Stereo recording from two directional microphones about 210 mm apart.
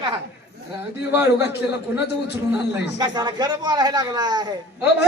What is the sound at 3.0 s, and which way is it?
Speech, 20° right (ahead or behind).